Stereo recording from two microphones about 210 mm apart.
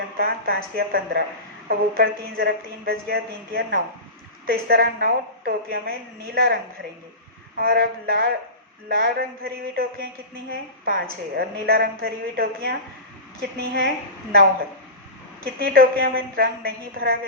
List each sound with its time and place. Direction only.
0.2 s a woman's voice: 45° right (ahead or behind)
15.5 s a woman's voice: 45° right (ahead or behind)